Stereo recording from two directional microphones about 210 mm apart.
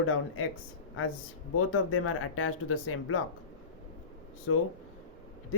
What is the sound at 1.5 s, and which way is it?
Speech, 80° left.